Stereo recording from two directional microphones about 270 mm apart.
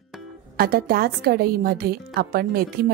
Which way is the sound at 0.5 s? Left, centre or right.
Right.